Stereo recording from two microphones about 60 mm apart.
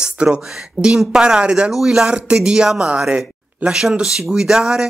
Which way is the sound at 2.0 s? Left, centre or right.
Centre.